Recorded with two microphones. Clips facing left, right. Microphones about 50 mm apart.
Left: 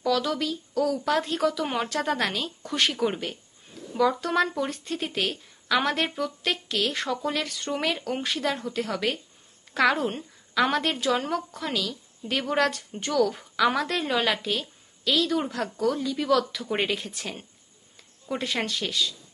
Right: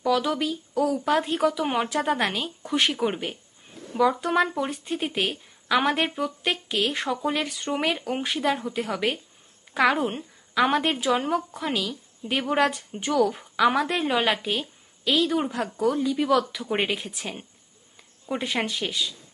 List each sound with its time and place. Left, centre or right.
0.0 s a woman's voice: centre